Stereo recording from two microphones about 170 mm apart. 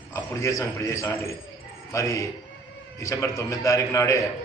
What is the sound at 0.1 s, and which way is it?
A man's voice, 20° left (ahead or behind).